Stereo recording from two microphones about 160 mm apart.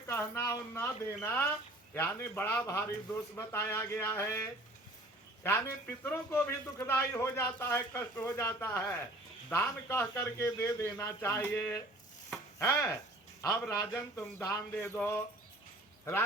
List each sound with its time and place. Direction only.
0.1 s a man's voice: 15° left (ahead or behind)